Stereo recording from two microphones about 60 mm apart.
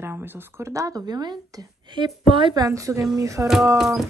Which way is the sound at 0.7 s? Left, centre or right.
Right.